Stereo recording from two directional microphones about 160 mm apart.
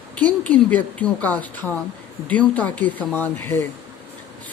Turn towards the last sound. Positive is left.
turn(degrees=15)  # may be behind; listen again after turning